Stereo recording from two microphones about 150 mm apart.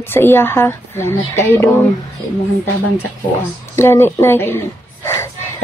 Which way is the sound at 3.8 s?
15° left (ahead or behind).